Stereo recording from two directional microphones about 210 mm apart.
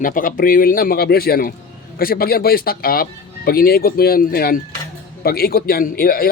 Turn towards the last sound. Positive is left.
turn(degrees=45)  # may be behind; listen again after turning